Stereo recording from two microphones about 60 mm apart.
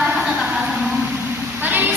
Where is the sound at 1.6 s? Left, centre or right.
Right.